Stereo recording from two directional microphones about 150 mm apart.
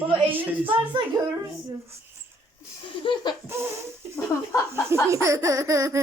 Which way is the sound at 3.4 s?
15° right (ahead or behind).